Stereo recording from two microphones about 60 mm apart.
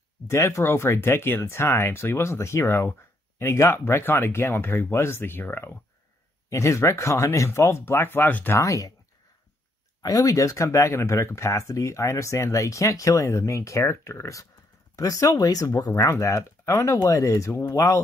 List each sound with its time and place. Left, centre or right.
0.3 s speech: left
6.5 s speech: left
8.5 s speech: left
10.0 s speech: left
15.0 s speech: left
15.4 s speech: left
15.9 s speech: left
17.1 s speech: left
17.5 s speech: left